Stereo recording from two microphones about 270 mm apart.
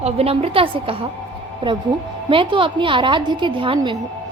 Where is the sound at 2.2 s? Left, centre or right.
Centre.